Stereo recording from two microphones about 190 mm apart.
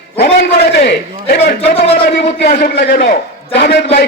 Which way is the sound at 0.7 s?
60° left (ahead or behind).